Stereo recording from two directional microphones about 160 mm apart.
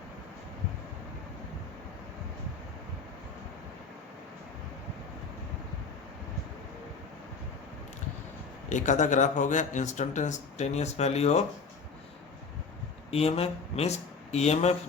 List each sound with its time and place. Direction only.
8.7 s speech: 50° left (ahead or behind)
13.1 s speech: 40° left (ahead or behind)